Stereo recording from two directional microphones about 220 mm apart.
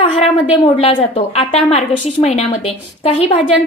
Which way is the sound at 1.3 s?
30° left (ahead or behind).